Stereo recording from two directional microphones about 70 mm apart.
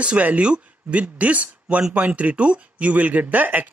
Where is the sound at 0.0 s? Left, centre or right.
Centre.